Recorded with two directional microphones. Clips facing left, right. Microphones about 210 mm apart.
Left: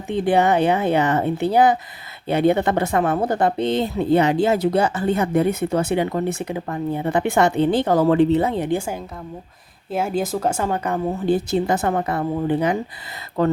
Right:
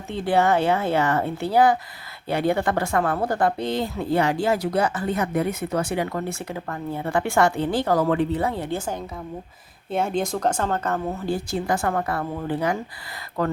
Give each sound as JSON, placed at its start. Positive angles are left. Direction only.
{"t": 0.1, "sound": "speech", "side_deg": 20}
{"t": 9.9, "sound": "speech", "side_deg": 5}